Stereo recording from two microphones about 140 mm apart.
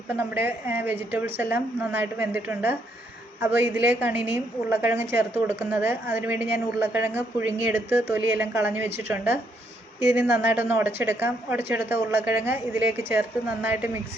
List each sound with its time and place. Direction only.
0.1 s a woman's voice: 15° right (ahead or behind)